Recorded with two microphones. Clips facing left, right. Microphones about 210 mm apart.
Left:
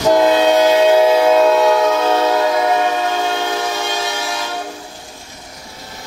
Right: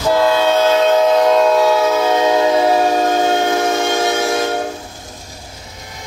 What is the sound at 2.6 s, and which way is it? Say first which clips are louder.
Train: right 3 dB; 35° right (ahead or behind).